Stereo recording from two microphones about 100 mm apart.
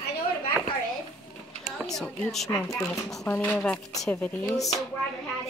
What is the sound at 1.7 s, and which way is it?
Speech, 5° left (ahead or behind).